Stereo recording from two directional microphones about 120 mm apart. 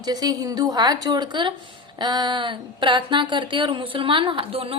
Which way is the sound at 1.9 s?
35° right (ahead or behind).